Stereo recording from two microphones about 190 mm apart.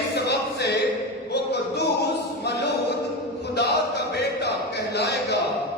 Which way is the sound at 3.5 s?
60° left (ahead or behind).